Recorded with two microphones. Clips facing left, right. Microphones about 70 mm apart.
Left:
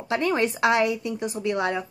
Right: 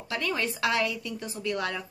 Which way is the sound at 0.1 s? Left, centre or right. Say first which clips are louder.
Left 7 dB; left.